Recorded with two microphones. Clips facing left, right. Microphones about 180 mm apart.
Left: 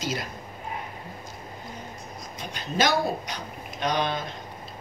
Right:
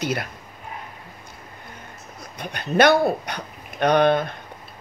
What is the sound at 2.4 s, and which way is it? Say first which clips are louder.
Speech: right 8 dB; 60° right (ahead or behind).